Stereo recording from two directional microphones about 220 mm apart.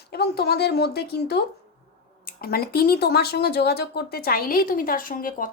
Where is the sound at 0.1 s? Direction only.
45° left (ahead or behind).